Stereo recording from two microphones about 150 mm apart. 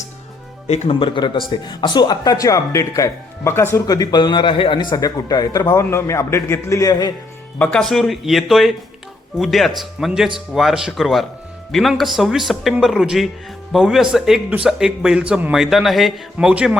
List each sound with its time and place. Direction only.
0.7 s speech: 40° left (ahead or behind); by 7.1 s 20° left (ahead or behind)
7.6 s speech: 5° left (ahead or behind)